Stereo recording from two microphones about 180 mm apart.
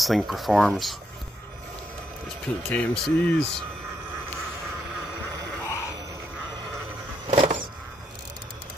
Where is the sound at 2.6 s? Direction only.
5° left (ahead or behind).